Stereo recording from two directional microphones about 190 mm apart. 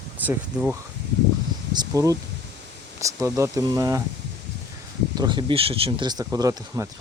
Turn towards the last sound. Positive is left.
turn(degrees=-15)  # may be behind; listen again after turning